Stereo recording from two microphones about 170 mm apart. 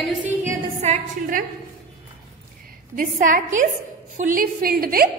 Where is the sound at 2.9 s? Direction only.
50° right (ahead or behind).